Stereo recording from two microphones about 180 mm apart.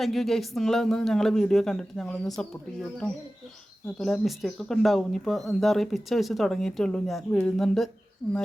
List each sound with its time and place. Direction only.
0.0 s speech: centre (ahead or behind)
3.9 s speech: centre (ahead or behind)
8.2 s speech: 15° left (ahead or behind)